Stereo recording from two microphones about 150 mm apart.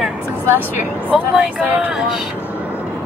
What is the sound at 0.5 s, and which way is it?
Speech, 10° right (ahead or behind).